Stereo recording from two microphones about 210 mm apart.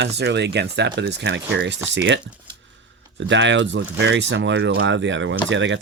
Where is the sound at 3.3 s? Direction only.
60° right (ahead or behind).